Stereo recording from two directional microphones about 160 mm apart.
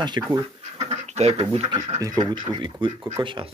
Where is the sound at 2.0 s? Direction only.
25° right (ahead or behind).